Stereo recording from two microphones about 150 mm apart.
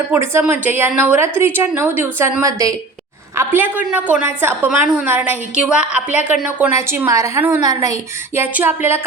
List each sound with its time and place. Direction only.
0.1 s a woman's voice: 15° right (ahead or behind)
3.3 s a woman's voice: 10° right (ahead or behind)